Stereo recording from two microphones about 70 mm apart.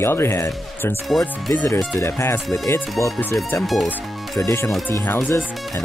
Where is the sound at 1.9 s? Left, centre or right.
Left.